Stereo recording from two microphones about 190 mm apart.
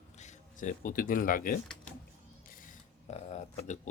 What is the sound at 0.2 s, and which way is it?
Speech, 40° left (ahead or behind).